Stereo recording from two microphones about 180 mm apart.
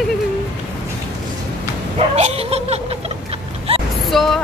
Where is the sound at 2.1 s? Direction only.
35° right (ahead or behind).